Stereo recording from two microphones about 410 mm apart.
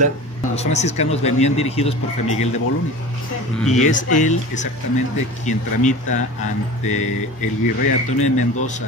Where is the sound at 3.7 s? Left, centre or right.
Centre.